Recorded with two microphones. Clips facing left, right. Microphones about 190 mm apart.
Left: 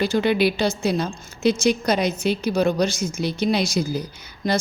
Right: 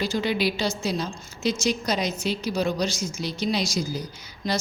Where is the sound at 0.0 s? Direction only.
60° left (ahead or behind).